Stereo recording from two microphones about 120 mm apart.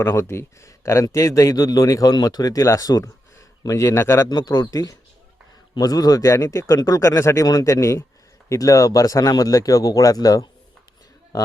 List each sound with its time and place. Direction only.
0.0 s a man's voice: 20° left (ahead or behind)